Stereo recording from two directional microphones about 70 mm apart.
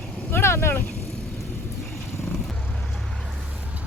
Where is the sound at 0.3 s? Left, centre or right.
Left.